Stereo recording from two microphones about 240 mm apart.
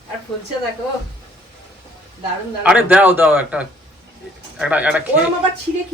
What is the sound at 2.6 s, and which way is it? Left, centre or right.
A man's voice, centre.